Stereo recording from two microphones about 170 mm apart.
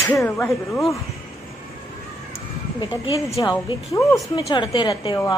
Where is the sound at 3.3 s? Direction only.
20° left (ahead or behind).